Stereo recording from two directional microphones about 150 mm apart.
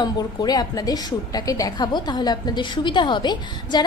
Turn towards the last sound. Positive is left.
turn(degrees=30)  # may be behind; listen again after turning